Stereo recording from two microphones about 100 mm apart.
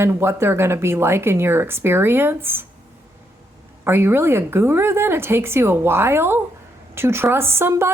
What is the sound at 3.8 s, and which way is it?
A woman's voice, 25° right (ahead or behind).